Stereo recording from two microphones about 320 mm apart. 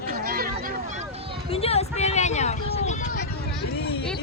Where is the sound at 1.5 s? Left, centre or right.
Centre.